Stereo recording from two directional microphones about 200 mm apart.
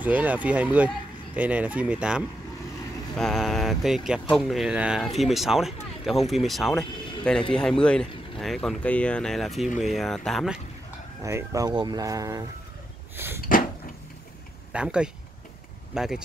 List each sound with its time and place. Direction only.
0.0 s speech: 10° right (ahead or behind)
11.2 s speech: 15° right (ahead or behind)
13.1 s a sound: 10° right (ahead or behind)
14.7 s speech: 5° right (ahead or behind)